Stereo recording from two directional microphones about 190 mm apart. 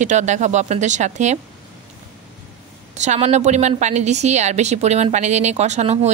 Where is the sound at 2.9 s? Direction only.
35° right (ahead or behind).